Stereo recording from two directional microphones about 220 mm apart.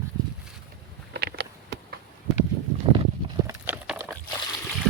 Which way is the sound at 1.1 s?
50° right (ahead or behind).